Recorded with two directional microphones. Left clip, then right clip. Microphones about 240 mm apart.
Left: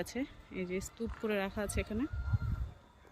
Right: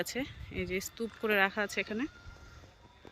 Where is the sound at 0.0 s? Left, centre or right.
Centre.